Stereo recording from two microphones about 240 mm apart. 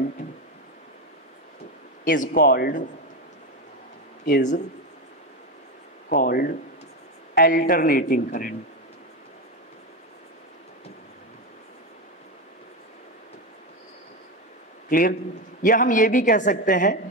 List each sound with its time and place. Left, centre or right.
2.0 s a woman's voice: left
4.3 s a woman's voice: left
6.0 s a woman's voice: left
14.9 s a man's voice: left